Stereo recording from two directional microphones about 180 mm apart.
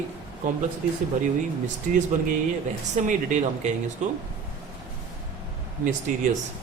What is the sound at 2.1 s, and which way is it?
Speech, 45° right (ahead or behind).